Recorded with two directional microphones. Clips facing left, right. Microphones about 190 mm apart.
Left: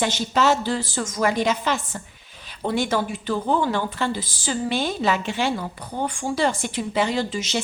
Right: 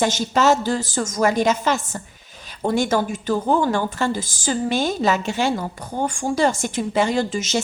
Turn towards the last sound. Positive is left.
turn(degrees=-45)  # may be behind; listen again after turning